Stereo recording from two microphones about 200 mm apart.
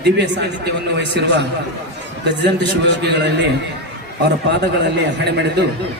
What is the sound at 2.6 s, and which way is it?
Speech, 60° right (ahead or behind).